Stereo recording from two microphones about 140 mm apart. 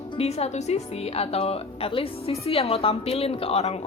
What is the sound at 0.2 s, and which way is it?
A woman's voice, 50° left (ahead or behind).